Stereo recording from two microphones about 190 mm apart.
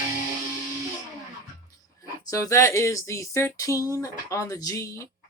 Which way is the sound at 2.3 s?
15° left (ahead or behind).